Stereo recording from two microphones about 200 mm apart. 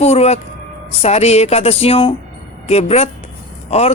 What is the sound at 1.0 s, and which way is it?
Speech, 30° left (ahead or behind).